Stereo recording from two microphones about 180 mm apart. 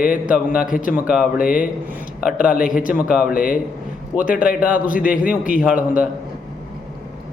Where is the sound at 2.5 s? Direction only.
50° left (ahead or behind).